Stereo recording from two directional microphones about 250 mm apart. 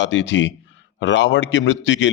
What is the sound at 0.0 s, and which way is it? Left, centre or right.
A man's voice, left.